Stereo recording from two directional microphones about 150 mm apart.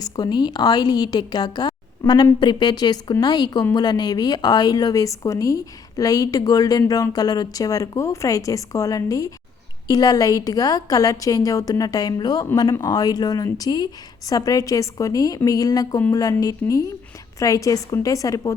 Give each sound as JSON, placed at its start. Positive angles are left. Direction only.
{"t": 0.0, "sound": "a woman's voice", "side_deg": 30}